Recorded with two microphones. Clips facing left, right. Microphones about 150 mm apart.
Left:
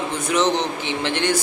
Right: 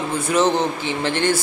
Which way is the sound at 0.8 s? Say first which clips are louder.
Right 2 dB; 15° left (ahead or behind).